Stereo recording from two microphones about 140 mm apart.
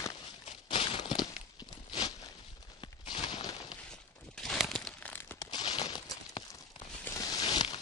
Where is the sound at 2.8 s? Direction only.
35° left (ahead or behind).